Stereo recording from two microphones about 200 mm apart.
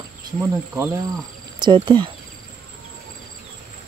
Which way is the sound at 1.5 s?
25° right (ahead or behind).